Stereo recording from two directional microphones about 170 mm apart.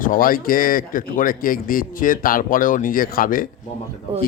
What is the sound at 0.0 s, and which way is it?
Speech, 55° left (ahead or behind).